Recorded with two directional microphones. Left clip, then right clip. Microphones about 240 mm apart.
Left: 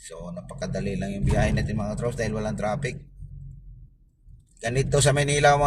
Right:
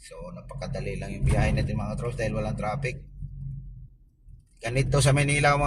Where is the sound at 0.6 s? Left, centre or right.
Centre.